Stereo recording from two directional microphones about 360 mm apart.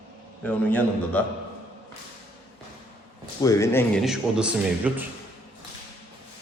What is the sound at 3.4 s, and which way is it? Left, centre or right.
A man's voice, centre.